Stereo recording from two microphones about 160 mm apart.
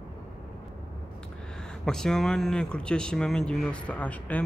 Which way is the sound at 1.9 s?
5° left (ahead or behind).